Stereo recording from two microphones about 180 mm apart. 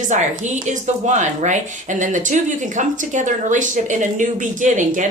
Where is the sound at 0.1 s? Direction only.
40° right (ahead or behind).